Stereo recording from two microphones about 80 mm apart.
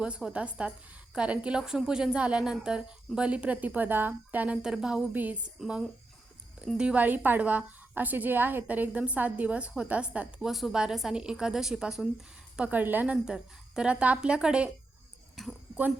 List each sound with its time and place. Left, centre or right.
0.0 s a woman's voice: centre
4.5 s a woman's voice: centre
10.5 s a woman's voice: centre
12.5 s a woman's voice: centre
13.2 s a woman's voice: centre